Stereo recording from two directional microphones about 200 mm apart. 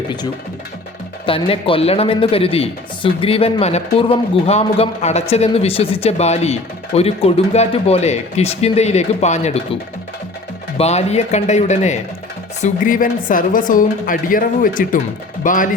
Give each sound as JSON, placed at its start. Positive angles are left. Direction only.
{"t": 1.3, "sound": "speech", "side_deg": 25}
{"t": 10.8, "sound": "a woman's voice", "side_deg": 30}